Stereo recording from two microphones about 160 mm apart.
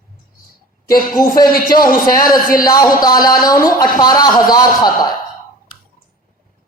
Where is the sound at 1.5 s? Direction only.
65° left (ahead or behind).